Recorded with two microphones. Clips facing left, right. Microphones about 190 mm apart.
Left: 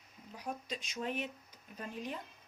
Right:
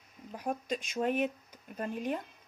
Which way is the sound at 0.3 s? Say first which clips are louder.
Right 7 dB; 50° right (ahead or behind).